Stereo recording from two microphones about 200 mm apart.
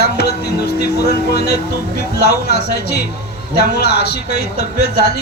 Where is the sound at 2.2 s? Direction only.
55° left (ahead or behind).